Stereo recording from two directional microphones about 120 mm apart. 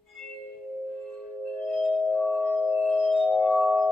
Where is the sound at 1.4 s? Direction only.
Centre (ahead or behind).